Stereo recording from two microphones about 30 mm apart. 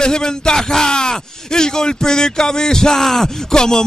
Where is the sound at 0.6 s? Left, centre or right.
Centre.